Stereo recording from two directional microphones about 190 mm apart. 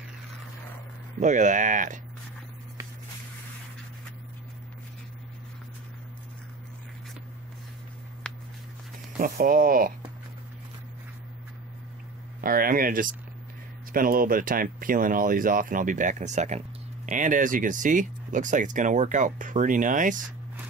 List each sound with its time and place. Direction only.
1.2 s speech: 40° right (ahead or behind)
9.2 s speech: 50° right (ahead or behind)
12.4 s speech: 50° right (ahead or behind)